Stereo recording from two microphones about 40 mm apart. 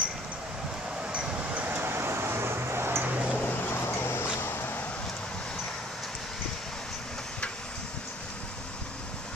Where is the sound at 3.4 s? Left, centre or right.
Left.